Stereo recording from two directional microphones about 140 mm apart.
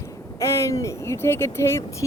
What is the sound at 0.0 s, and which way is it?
Speech, 20° left (ahead or behind).